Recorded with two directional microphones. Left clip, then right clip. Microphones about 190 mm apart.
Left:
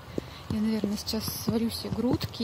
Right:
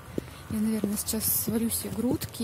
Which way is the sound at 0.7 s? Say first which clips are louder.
Left 1 dB; 15° right (ahead or behind).